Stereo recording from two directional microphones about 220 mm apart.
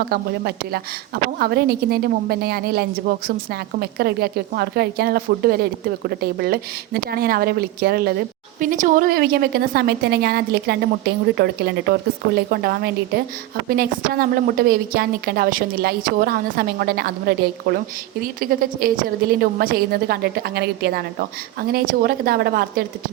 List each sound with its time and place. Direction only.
0.0 s a woman's voice: 45° right (ahead or behind)